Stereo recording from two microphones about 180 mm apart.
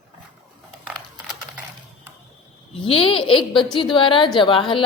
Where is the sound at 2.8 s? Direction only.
30° left (ahead or behind).